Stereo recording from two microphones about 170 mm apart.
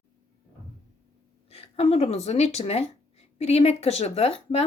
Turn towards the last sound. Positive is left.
turn(degrees=40)  # may be behind; listen again after turning